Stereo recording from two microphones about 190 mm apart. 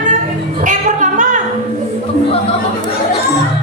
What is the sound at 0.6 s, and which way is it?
Singing, 40° right (ahead or behind).